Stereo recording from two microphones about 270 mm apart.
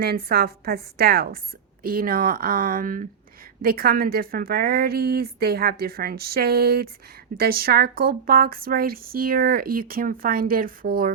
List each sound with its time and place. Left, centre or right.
0.0 s speech: right